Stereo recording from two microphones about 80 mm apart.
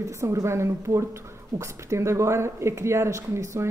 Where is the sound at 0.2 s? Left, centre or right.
Right.